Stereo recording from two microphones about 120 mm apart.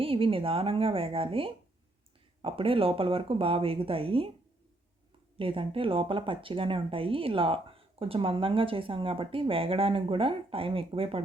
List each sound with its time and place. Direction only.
0.0 s speech: 50° right (ahead or behind)
5.4 s speech: 50° right (ahead or behind)